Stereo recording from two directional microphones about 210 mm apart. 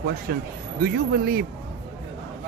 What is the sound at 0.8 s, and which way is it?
Speech, 45° right (ahead or behind).